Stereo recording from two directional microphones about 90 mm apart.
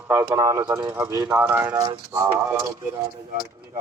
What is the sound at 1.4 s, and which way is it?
Speech, 20° right (ahead or behind).